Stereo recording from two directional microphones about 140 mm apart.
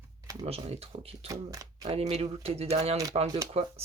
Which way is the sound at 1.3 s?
25° right (ahead or behind).